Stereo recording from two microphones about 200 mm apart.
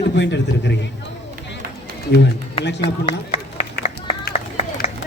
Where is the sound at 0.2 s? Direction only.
60° left (ahead or behind).